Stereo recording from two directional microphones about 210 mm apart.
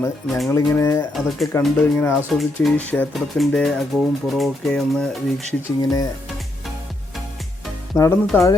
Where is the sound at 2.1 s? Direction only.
Centre (ahead or behind).